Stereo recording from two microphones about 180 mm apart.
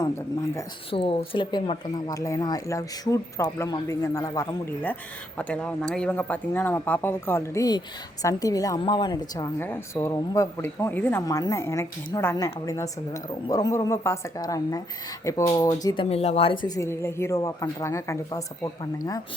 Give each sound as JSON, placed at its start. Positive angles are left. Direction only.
{"t": 0.9, "sound": "speech", "side_deg": 30}
{"t": 9.6, "sound": "speech", "side_deg": 10}
{"t": 16.0, "sound": "speech", "side_deg": 35}